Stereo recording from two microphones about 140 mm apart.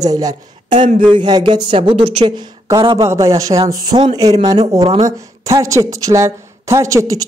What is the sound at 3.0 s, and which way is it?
A woman's voice, 20° right (ahead or behind).